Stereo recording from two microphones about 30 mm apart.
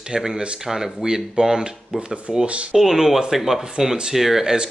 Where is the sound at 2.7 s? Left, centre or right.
Centre.